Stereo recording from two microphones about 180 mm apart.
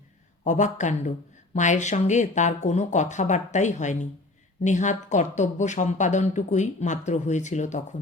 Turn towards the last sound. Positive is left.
turn(degrees=40)  # may be behind; listen again after turning